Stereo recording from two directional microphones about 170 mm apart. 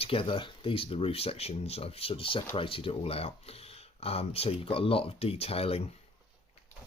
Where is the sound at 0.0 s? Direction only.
30° left (ahead or behind).